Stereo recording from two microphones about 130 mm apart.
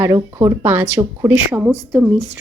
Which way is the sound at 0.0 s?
25° right (ahead or behind).